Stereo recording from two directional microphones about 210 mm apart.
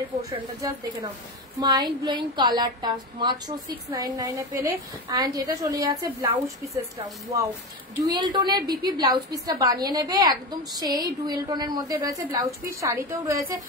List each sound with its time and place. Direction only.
0.6 s a woman's voice: 15° right (ahead or behind)